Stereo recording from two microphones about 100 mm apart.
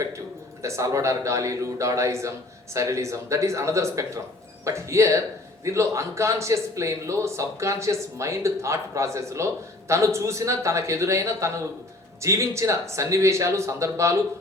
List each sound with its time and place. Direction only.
0.6 s a man's voice: 30° right (ahead or behind)